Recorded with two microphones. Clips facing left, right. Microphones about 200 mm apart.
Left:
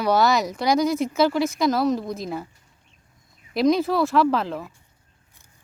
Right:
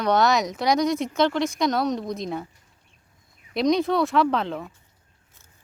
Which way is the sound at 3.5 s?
Centre (ahead or behind).